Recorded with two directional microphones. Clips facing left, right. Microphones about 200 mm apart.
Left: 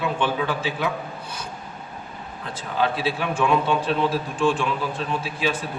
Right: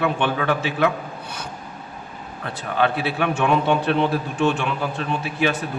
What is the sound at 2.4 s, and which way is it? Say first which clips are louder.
A man's voice: right 3 dB; 65° right (ahead or behind).